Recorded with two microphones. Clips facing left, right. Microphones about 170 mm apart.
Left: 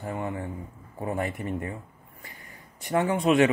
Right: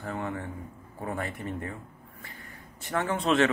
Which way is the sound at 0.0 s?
15° left (ahead or behind).